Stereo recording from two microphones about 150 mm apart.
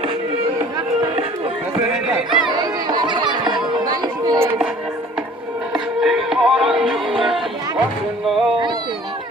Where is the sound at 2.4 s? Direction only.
25° right (ahead or behind).